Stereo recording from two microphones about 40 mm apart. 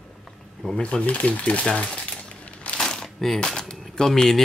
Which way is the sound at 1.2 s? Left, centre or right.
Left.